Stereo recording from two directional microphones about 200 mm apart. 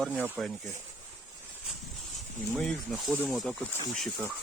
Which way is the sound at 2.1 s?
5° left (ahead or behind).